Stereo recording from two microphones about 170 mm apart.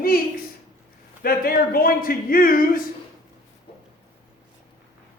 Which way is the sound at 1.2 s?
60° left (ahead or behind).